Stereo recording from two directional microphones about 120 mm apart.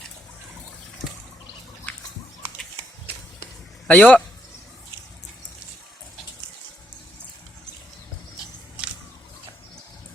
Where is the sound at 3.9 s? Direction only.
10° left (ahead or behind).